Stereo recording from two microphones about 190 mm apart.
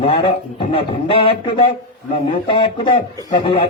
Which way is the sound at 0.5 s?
30° left (ahead or behind).